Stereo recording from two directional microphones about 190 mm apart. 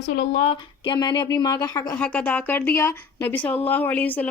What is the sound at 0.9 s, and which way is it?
Speech, 25° left (ahead or behind).